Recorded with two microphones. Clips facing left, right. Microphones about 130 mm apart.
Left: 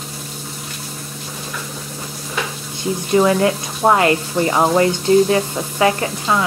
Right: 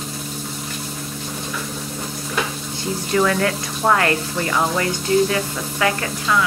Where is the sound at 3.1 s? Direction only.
20° left (ahead or behind).